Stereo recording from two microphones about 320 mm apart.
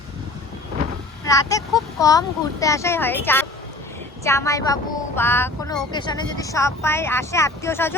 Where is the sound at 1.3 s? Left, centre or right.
Centre.